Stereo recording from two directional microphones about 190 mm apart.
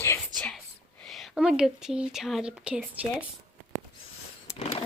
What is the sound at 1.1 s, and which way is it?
Speech, centre (ahead or behind).